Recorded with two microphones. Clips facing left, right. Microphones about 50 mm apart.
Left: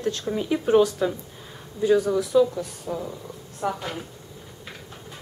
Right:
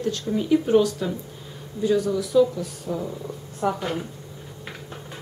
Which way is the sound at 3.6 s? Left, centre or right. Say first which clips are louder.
Right 3 dB; centre.